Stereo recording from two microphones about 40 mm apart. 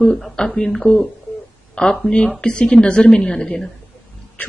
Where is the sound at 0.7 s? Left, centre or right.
Centre.